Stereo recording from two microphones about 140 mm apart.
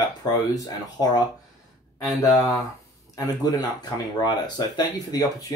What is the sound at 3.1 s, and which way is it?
Speech, 30° left (ahead or behind).